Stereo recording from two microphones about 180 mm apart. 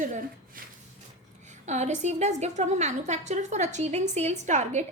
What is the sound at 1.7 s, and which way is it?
A woman's voice, 40° right (ahead or behind).